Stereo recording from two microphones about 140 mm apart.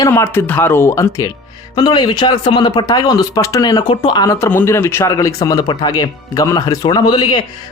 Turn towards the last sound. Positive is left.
turn(degrees=30)  # may be behind; listen again after turning